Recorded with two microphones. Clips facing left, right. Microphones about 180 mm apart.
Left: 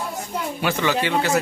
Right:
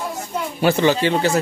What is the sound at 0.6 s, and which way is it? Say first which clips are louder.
Speech: right 6 dB; 30° right (ahead or behind).